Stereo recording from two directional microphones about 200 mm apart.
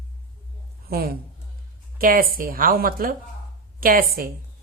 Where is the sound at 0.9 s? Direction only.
50° right (ahead or behind).